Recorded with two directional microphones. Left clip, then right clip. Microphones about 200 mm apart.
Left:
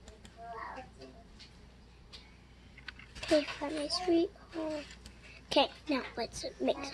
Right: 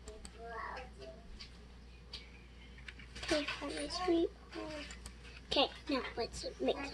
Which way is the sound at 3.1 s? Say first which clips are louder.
Left 6 dB; 30° left (ahead or behind).